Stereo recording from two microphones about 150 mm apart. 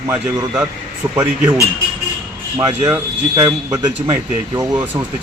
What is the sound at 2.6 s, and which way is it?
A man's voice, 15° right (ahead or behind).